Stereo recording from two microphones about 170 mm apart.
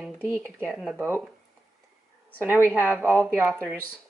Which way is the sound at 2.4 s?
10° right (ahead or behind).